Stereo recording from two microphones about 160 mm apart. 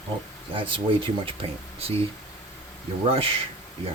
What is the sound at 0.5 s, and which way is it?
Speech, 35° right (ahead or behind).